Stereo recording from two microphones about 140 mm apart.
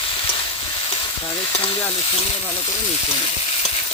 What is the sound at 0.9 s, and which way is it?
Stir, 35° left (ahead or behind).